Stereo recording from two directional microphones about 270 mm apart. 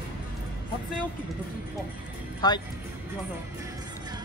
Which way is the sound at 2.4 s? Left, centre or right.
Centre.